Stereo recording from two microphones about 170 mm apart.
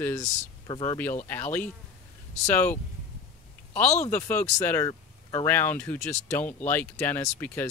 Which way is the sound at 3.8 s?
40° left (ahead or behind).